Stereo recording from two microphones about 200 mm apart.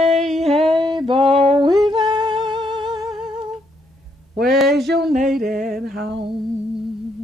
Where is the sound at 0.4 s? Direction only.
30° right (ahead or behind).